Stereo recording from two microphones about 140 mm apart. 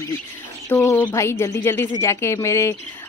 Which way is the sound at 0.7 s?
15° left (ahead or behind).